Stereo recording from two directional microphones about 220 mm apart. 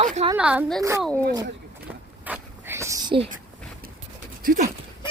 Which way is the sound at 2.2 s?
10° right (ahead or behind).